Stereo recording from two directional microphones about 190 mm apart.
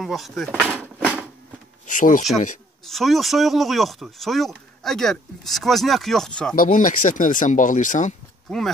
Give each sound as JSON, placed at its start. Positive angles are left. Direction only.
{"t": 0.0, "sound": "speech", "side_deg": 0}
{"t": 1.9, "sound": "speech", "side_deg": 45}
{"t": 2.8, "sound": "speech", "side_deg": 0}
{"t": 6.5, "sound": "speech", "side_deg": 45}